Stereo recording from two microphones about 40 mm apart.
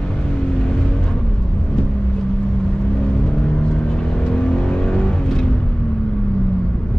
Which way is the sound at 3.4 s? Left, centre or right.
Left.